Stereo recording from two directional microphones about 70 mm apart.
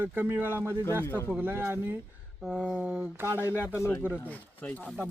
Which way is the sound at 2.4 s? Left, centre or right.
Centre.